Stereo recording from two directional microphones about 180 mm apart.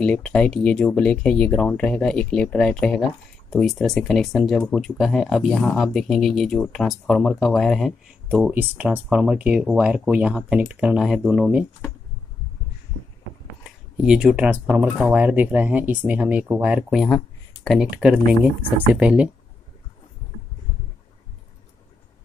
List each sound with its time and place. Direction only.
0.0 s speech: 5° left (ahead or behind)
13.7 s speech: 5° right (ahead or behind)